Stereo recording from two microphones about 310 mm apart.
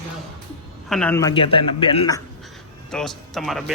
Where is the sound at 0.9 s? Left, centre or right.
Centre.